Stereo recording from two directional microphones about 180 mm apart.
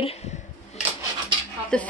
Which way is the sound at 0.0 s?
35° left (ahead or behind).